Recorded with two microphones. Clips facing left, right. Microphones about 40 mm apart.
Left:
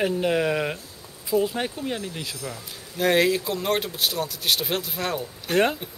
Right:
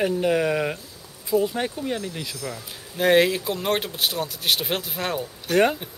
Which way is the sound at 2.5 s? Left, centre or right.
Centre.